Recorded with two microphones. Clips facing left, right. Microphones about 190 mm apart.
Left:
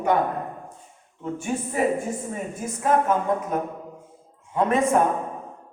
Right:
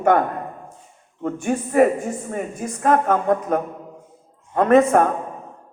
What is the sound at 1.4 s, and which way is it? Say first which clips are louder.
A woman's voice: right 7 dB; 65° right (ahead or behind).